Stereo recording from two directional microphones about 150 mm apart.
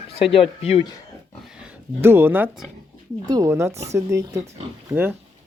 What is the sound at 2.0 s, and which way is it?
Speech, 15° right (ahead or behind).